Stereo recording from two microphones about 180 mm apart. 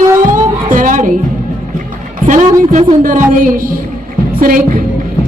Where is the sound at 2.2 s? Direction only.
45° right (ahead or behind).